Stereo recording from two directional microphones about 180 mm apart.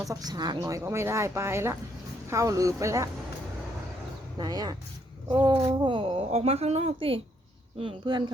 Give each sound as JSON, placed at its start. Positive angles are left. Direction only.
{"t": 0.1, "sound": "speech", "side_deg": -20}
{"t": 4.4, "sound": "a woman's voice", "side_deg": -20}